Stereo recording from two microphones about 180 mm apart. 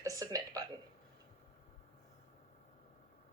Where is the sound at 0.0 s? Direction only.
20° right (ahead or behind).